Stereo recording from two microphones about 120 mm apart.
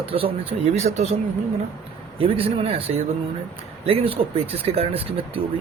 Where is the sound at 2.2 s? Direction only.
50° right (ahead or behind).